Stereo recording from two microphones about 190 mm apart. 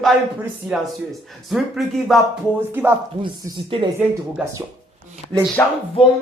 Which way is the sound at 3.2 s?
25° right (ahead or behind).